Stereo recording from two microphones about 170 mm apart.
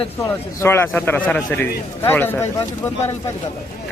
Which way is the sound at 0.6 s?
15° left (ahead or behind).